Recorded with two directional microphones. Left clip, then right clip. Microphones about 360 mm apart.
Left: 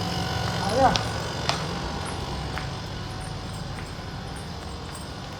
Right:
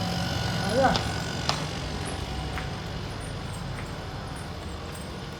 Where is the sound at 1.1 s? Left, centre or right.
Left.